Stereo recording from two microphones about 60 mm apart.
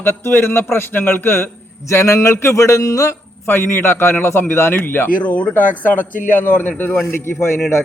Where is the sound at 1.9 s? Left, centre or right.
Left.